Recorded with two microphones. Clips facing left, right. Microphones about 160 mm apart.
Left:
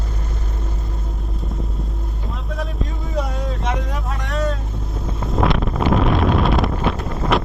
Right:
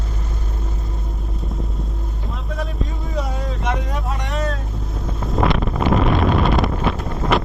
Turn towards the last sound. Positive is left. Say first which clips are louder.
# even
turn(degrees=0)  # may be behind; listen again after turning